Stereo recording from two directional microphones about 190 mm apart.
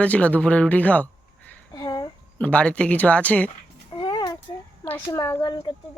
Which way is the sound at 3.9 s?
25° left (ahead or behind).